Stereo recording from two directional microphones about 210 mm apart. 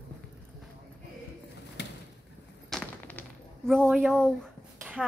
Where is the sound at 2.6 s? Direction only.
5° left (ahead or behind).